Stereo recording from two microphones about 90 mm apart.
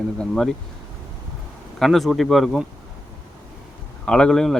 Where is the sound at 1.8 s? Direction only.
Centre (ahead or behind).